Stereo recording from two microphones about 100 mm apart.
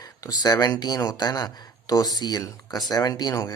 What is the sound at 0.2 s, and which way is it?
Speech, 40° left (ahead or behind).